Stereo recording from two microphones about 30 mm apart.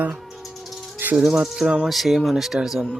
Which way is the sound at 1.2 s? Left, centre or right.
Centre.